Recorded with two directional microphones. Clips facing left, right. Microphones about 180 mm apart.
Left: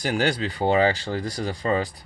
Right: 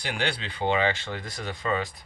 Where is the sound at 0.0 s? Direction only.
40° left (ahead or behind).